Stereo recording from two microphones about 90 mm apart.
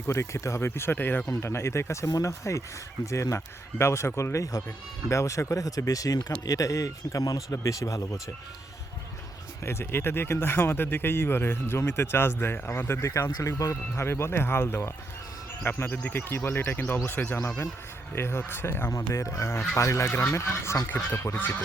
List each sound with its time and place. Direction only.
0.1 s speech: 35° left (ahead or behind)
9.6 s speech: 25° left (ahead or behind)